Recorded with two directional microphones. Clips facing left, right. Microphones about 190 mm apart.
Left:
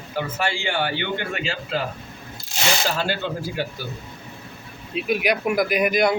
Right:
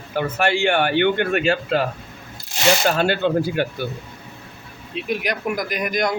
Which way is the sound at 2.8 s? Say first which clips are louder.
Right 6 dB; 60° right (ahead or behind).